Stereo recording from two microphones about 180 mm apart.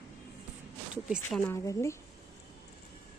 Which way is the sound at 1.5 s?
15° left (ahead or behind).